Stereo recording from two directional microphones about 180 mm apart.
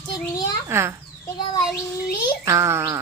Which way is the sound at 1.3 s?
20° left (ahead or behind).